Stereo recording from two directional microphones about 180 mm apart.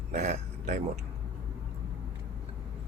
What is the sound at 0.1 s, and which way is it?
Speech, 40° right (ahead or behind).